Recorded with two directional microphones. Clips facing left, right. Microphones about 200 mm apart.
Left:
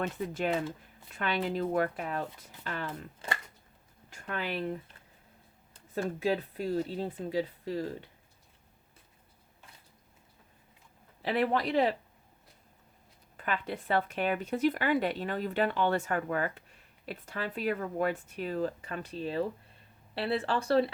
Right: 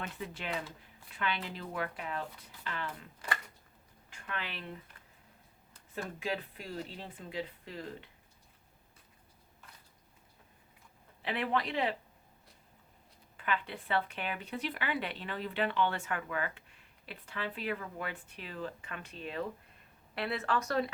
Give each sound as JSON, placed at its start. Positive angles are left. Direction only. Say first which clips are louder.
{"t": 0.0, "sound": "speech", "louder": "left 9 dB", "side_deg": 45}
{"t": 2.8, "sound": "speech", "louder": "left 3 dB", "side_deg": 25}
{"t": 4.1, "sound": "speech", "louder": "left 7 dB", "side_deg": 40}
{"t": 5.9, "sound": "speech", "louder": "left 7 dB", "side_deg": 40}
{"t": 11.2, "sound": "speech", "louder": "left 5 dB", "side_deg": 40}
{"t": 13.3, "sound": "speech", "louder": "left 2 dB", "side_deg": 40}